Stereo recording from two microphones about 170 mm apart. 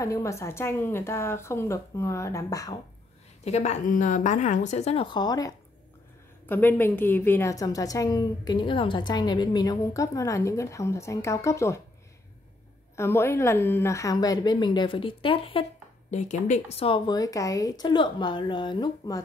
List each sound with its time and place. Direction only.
0.0 s a woman's voice: 15° left (ahead or behind)
3.4 s a woman's voice: 40° left (ahead or behind); by 5.6 s 20° left (ahead or behind)
6.4 s a woman's voice: 10° left (ahead or behind)
12.9 s a woman's voice: 15° left (ahead or behind); by 15.6 s 30° left (ahead or behind)
16.1 s a woman's voice: 45° left (ahead or behind); by 19.2 s 25° left (ahead or behind)